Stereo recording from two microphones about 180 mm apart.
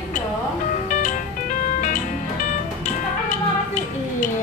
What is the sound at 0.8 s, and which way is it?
Music, 45° left (ahead or behind).